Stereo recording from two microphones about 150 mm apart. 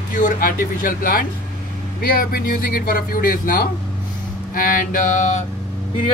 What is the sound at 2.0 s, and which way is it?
Speech, 85° left.